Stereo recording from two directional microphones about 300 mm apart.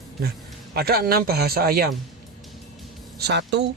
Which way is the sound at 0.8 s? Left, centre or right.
Right.